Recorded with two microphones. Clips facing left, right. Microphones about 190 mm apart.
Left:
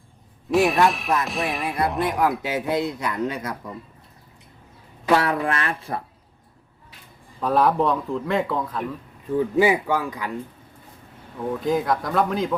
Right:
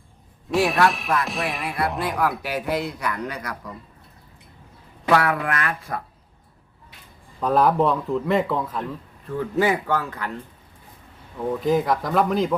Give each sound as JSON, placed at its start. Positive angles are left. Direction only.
{"t": 0.5, "sound": "a man's voice", "side_deg": 0}
{"t": 2.0, "sound": "speech", "side_deg": 20}
{"t": 5.1, "sound": "speech", "side_deg": 25}
{"t": 7.3, "sound": "a man's voice", "side_deg": 0}
{"t": 8.8, "sound": "speech", "side_deg": 15}
{"t": 11.6, "sound": "a man's voice", "side_deg": 0}